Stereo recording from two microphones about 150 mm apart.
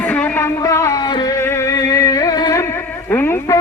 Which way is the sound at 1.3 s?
15° left (ahead or behind).